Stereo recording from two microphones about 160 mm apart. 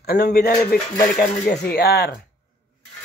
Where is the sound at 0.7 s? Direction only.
70° left (ahead or behind).